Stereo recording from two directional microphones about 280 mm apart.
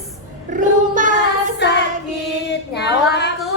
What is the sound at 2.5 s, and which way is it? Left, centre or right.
Speech, left.